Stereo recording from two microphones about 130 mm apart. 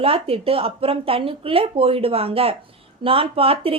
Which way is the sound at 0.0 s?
45° right (ahead or behind).